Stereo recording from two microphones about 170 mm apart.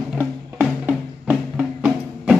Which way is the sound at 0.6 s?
5° right (ahead or behind).